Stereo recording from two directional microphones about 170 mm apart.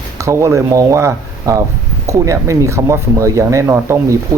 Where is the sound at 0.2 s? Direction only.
15° right (ahead or behind).